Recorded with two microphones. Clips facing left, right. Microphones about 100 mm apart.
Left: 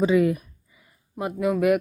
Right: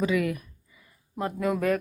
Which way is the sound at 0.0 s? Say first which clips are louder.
Left 6 dB; 25° left (ahead or behind).